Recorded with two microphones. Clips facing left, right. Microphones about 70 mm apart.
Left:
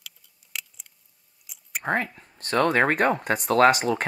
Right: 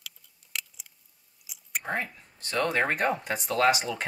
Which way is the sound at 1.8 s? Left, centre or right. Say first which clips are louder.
Left 6 dB; left.